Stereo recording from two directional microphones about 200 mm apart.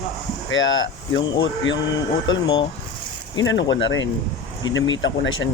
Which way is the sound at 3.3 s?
70° left (ahead or behind).